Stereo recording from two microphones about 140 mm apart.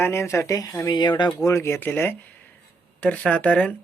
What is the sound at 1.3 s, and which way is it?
Speech, 20° left (ahead or behind).